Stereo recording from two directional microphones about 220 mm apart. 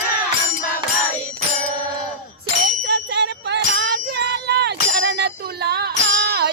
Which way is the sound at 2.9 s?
50° right (ahead or behind).